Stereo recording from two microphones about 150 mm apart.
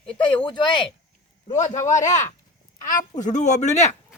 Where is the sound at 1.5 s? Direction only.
55° left (ahead or behind).